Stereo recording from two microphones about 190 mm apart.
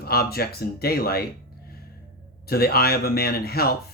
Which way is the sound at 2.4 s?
55° left (ahead or behind).